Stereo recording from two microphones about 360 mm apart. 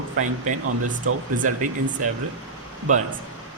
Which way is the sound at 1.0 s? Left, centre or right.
Right.